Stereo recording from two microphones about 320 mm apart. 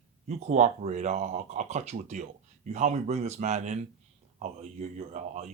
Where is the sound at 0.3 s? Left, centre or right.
Right.